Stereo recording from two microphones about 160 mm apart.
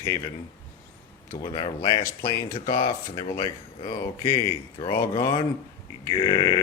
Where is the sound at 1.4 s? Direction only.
30° left (ahead or behind).